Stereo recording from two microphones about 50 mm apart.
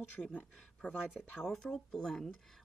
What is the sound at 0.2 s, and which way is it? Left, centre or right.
Speech, left.